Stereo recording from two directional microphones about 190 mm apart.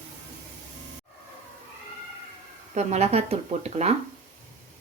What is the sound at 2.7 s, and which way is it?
Speech, 35° right (ahead or behind).